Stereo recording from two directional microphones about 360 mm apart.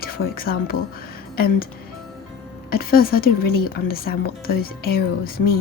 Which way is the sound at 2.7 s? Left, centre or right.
Left.